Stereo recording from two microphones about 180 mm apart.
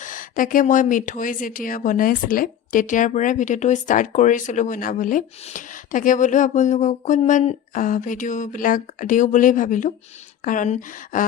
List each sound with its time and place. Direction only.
0.0 s speech: 50° left (ahead or behind)